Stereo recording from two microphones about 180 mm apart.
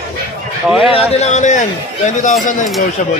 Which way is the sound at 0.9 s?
40° left (ahead or behind).